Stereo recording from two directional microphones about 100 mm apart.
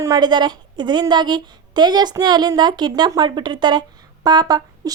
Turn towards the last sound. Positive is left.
turn(degrees=-40)  # may be behind; listen again after turning